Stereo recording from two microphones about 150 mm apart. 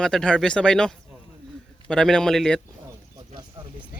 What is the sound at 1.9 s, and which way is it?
Speech, 5° left (ahead or behind).